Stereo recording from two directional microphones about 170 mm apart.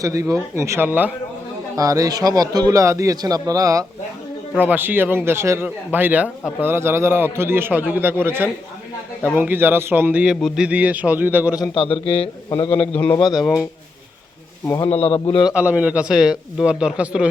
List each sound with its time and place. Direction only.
0.0 s a man's voice: 20° right (ahead or behind)
11.7 s a man's voice: 30° left (ahead or behind)
12.5 s a man's voice: 15° left (ahead or behind)
13.3 s speech: centre (ahead or behind)
14.8 s a man's voice: 35° left (ahead or behind)
15.4 s a man's voice: 5° right (ahead or behind)